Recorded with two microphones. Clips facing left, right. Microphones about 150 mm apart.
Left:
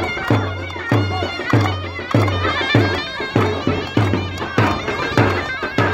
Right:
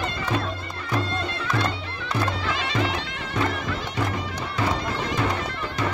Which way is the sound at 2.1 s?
75° left (ahead or behind).